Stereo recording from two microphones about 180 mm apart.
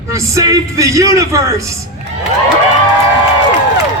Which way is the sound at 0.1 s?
15° right (ahead or behind).